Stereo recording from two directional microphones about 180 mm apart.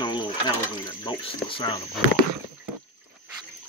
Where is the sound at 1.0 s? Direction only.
25° left (ahead or behind).